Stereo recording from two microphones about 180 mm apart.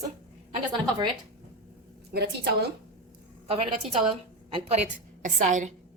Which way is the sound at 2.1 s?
65° right (ahead or behind).